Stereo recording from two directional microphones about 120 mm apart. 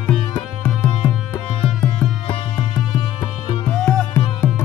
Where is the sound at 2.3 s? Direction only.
50° left (ahead or behind).